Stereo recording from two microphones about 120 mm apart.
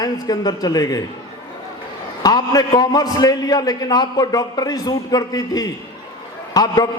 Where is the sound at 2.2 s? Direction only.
35° left (ahead or behind).